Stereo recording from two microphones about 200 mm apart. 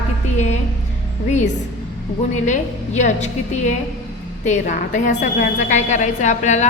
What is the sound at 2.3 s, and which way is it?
A woman's voice, 35° left (ahead or behind).